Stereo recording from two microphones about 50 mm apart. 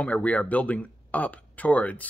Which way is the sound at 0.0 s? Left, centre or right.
Left.